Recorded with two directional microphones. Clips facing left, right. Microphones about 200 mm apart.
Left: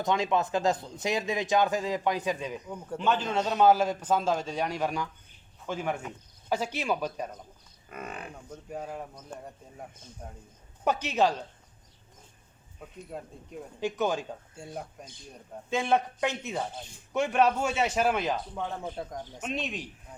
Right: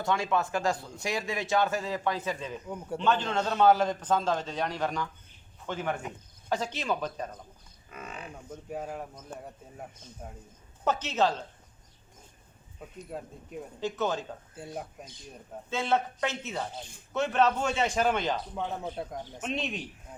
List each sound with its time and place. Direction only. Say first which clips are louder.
0.0 s a man's voice: left 2 dB; 20° left (ahead or behind)
7.9 s speech: left 3 dB; 55° left (ahead or behind)
8.4 s speech: right 2 dB; 5° right (ahead or behind)
10.8 s a man's voice: left 1 dB; 10° left (ahead or behind)
13.1 s speech: right 1 dB; centre (ahead or behind)
13.8 s a man's voice: left 2 dB; 15° left (ahead or behind)
14.5 s speech: right 2 dB; 5° right (ahead or behind)
15.7 s a man's voice: left 2 dB; 15° left (ahead or behind)
18.5 s speech: right 1 dB; 5° right (ahead or behind)